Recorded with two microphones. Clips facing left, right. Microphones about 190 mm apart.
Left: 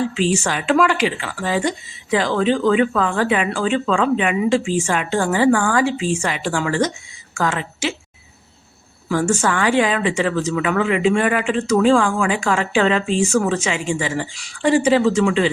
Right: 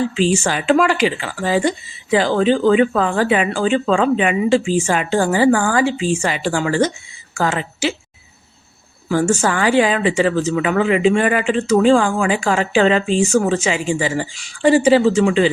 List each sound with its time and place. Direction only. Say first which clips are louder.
0.0 s speech: right 2 dB; centre (ahead or behind)
1.2 s speech: right 3 dB; 30° right (ahead or behind)
4.6 s speech: right 3 dB; centre (ahead or behind)
4.9 s speech: right 3 dB; 35° right (ahead or behind)
5.8 s speech: right 2 dB; centre (ahead or behind)
6.2 s speech: right 2 dB; 30° right (ahead or behind)
9.0 s speech: right 2 dB; 30° right (ahead or behind)